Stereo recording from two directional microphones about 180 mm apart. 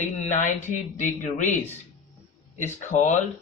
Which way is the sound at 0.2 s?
40° left (ahead or behind).